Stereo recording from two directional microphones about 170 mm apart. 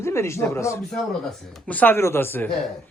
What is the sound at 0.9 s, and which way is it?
A man's voice, centre (ahead or behind).